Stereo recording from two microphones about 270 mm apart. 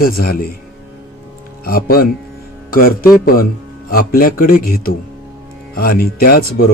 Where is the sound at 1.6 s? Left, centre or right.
Left.